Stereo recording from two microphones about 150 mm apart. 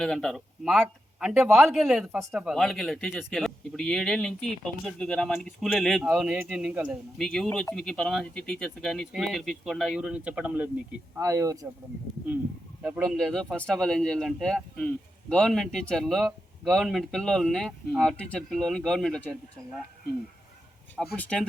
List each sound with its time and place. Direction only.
0.0 s a man's voice: 5° left (ahead or behind)
7.2 s a man's voice: 5° left (ahead or behind)
11.2 s speech: 20° right (ahead or behind)
12.8 s speech: 5° right (ahead or behind)
13.1 s a man's voice: 5° left (ahead or behind)
21.2 s speech: 5° left (ahead or behind)